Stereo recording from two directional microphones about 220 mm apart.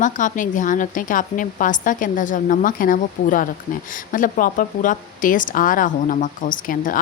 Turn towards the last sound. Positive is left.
turn(degrees=40)  # may be behind; listen again after turning